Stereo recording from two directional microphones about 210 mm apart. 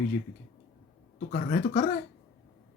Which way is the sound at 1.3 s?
40° left (ahead or behind).